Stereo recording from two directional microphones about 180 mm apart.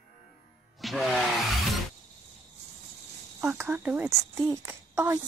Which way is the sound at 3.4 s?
10° right (ahead or behind).